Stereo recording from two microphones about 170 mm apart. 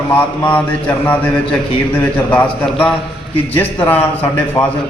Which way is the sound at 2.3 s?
10° left (ahead or behind).